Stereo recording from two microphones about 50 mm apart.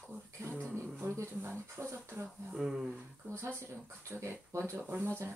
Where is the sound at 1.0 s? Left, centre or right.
Right.